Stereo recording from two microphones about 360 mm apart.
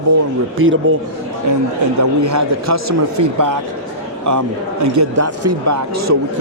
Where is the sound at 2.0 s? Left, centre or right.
Right.